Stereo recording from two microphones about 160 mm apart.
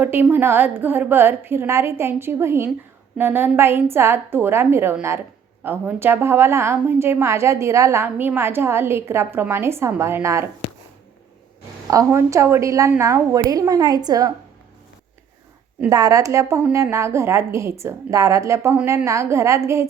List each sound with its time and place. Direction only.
0.0 s a woman's voice: 15° right (ahead or behind)
11.9 s a woman's voice: 20° right (ahead or behind)
15.9 s a woman's voice: 20° right (ahead or behind)